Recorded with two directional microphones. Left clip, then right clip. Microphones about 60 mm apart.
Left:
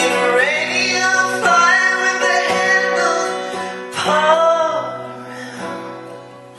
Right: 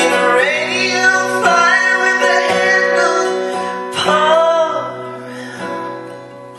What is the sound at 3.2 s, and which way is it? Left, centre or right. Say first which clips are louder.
Music: right 4 dB; left.